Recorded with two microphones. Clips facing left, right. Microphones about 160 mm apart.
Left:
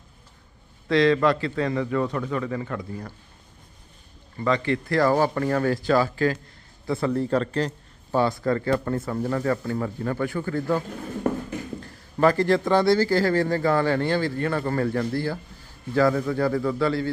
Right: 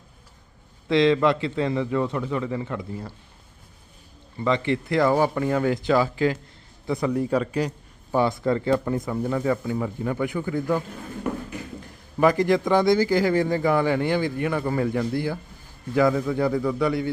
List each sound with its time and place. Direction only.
0.9 s a man's voice: 20° right (ahead or behind)
4.4 s a man's voice: 20° right (ahead or behind)
5.1 s a man's voice: 10° right (ahead or behind)
11.8 s a man's voice: 15° right (ahead or behind)